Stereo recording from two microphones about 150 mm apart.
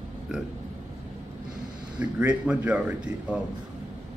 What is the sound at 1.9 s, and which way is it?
A man's voice, 10° right (ahead or behind).